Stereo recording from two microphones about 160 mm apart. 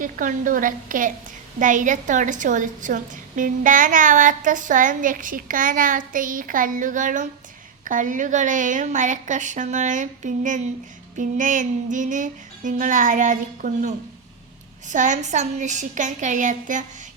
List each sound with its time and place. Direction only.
0.0 s a woman's voice: 55° right (ahead or behind)